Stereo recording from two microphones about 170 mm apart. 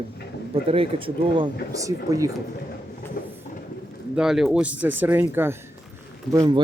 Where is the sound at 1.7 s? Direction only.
20° right (ahead or behind).